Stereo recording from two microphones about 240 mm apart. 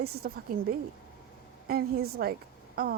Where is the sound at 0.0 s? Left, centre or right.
Right.